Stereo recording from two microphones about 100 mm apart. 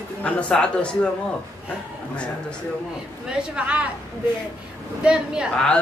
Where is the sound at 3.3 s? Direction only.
10° right (ahead or behind).